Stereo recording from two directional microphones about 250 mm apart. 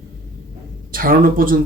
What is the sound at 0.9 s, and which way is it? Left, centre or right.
Speech, right.